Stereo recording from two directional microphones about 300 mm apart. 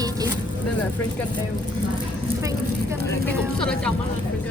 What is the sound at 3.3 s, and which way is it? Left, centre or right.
Speech, centre.